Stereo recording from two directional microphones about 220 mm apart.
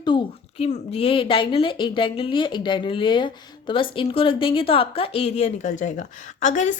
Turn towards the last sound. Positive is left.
turn(degrees=35)  # may be behind; listen again after turning